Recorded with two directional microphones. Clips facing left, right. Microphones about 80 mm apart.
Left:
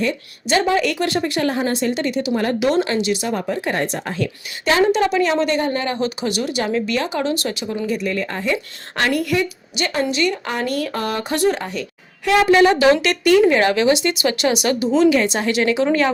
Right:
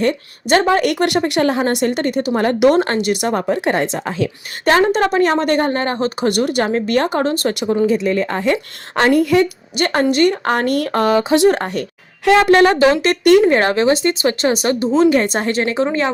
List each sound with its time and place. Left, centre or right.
0.0 s a woman's voice: right
4.8 s a woman's voice: right
8.5 s speech: right
9.7 s a woman's voice: right
15.9 s a woman's voice: right